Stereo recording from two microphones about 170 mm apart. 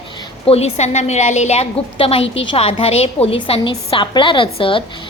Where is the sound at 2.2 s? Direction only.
90° left.